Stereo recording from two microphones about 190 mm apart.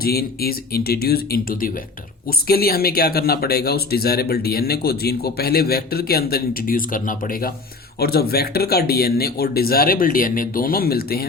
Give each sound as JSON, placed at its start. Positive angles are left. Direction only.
{"t": 0.0, "sound": "speech", "side_deg": 55}